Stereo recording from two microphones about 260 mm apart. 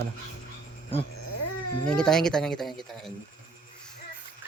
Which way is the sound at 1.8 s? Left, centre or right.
Centre.